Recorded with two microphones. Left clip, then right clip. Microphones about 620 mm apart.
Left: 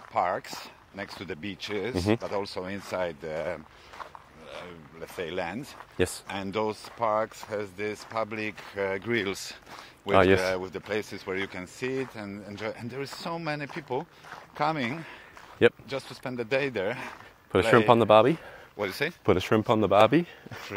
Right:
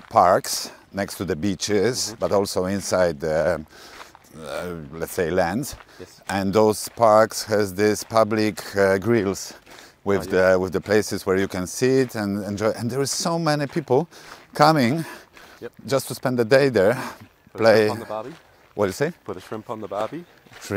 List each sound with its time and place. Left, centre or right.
0.1 s speech: right
18.0 s speech: left
18.8 s speech: right
19.2 s speech: left